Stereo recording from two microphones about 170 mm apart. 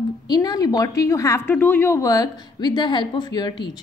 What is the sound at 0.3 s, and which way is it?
A woman's voice, 25° left (ahead or behind).